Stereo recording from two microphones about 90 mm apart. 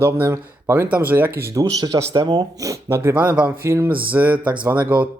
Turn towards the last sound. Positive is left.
turn(degrees=-15)  # may be behind; listen again after turning